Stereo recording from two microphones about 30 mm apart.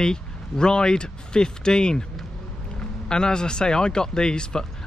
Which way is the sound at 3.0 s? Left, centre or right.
Left.